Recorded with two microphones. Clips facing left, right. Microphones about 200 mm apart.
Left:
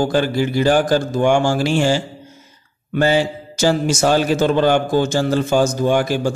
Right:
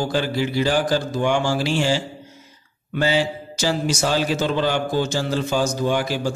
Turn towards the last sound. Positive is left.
turn(degrees=50)  # may be behind; listen again after turning